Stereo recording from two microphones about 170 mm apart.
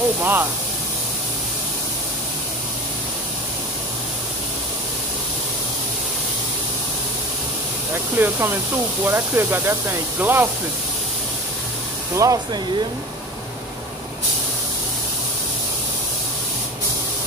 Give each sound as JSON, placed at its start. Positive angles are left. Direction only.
{"t": 0.2, "sound": "speech", "side_deg": -10}
{"t": 7.9, "sound": "speech", "side_deg": -15}
{"t": 12.2, "sound": "speech", "side_deg": -20}